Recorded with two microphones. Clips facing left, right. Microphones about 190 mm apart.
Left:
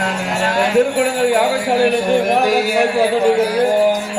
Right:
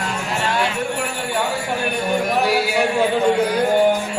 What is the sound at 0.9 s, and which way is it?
Speech, 90° left.